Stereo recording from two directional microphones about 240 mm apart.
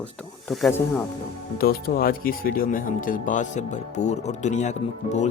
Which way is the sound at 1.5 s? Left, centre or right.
Left.